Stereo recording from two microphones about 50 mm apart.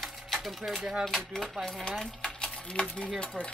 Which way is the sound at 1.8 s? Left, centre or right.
Centre.